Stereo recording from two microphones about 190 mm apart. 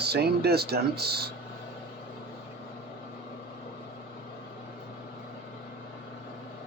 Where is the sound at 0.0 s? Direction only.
60° right (ahead or behind).